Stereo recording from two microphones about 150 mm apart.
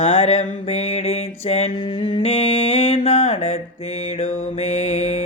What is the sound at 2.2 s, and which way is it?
Mantra, 45° left (ahead or behind).